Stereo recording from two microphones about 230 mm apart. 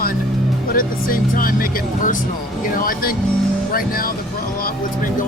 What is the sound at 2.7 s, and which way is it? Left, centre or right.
Speech, left.